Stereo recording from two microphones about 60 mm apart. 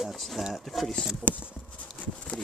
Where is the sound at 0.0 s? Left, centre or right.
Centre.